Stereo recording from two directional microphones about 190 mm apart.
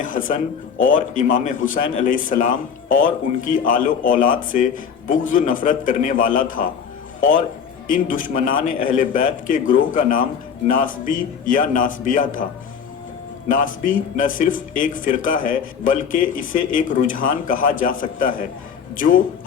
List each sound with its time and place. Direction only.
0.0 s a sound: 45° left (ahead or behind)
0.8 s speech: 45° left (ahead or behind)
13.5 s speech: 45° left (ahead or behind)